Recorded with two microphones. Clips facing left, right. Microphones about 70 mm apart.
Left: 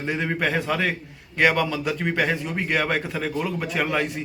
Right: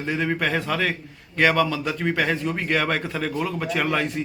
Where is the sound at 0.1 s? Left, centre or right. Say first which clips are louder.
Right 1 dB; centre.